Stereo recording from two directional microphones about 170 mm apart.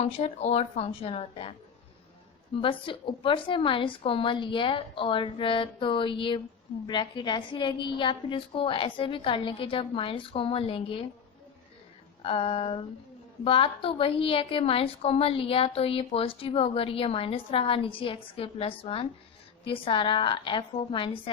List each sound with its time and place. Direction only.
0.0 s a woman's voice: 40° left (ahead or behind)
2.6 s a woman's voice: 30° left (ahead or behind)
12.2 s a woman's voice: 35° left (ahead or behind)